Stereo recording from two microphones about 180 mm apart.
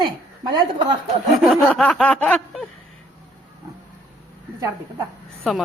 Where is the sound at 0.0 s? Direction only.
25° right (ahead or behind).